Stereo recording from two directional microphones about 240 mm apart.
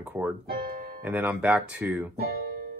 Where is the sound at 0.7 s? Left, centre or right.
Right.